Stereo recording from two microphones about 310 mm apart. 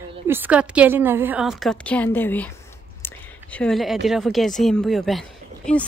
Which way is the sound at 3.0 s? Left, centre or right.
Centre.